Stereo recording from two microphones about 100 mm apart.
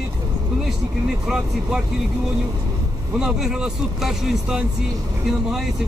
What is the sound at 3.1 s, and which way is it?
Speech, 5° right (ahead or behind).